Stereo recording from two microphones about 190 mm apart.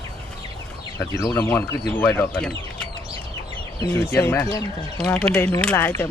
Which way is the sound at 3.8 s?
15° left (ahead or behind).